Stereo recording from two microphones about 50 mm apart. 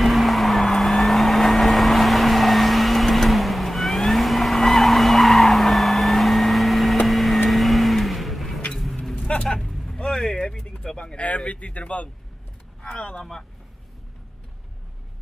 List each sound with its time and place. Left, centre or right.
0.0 s vehicle: centre
9.8 s vehicle: centre
10.7 s a sound: centre
12.9 s vehicle: left